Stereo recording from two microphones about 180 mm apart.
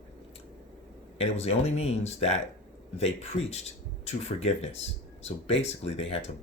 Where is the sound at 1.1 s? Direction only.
35° left (ahead or behind).